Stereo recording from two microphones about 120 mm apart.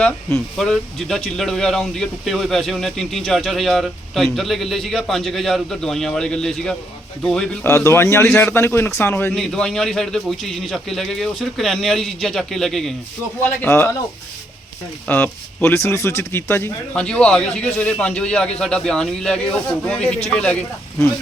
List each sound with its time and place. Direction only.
0.0 s speech: 20° left (ahead or behind)
0.5 s speech: 5° left (ahead or behind)
7.6 s a man's voice: 25° left (ahead or behind)
9.3 s speech: 5° left (ahead or behind)
13.4 s a man's voice: 15° left (ahead or behind)
15.0 s a man's voice: 15° left (ahead or behind)
16.9 s a man's voice: 10° left (ahead or behind)